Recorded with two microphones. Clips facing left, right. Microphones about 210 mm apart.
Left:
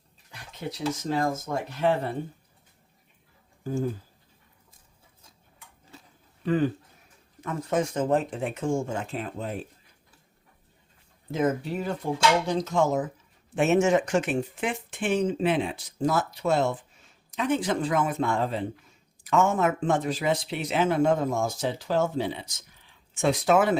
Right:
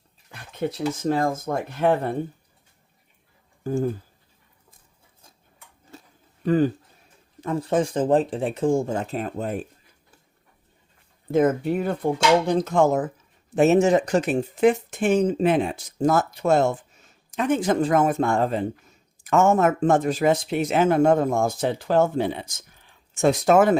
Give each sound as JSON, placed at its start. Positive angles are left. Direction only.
{"t": 0.3, "sound": "speech", "side_deg": -50}
{"t": 3.6, "sound": "speech", "side_deg": -50}
{"t": 6.4, "sound": "speech", "side_deg": -40}
{"t": 11.3, "sound": "speech", "side_deg": -55}
{"t": 13.5, "sound": "speech", "side_deg": -40}